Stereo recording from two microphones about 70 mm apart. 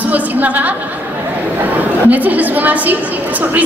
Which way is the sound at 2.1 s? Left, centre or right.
Right.